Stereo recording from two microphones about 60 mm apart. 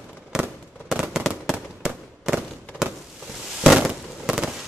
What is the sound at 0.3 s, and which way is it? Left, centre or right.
Fireworks, centre.